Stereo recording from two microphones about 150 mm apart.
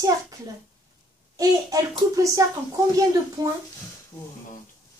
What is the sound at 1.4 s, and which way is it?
A woman's voice, 25° right (ahead or behind).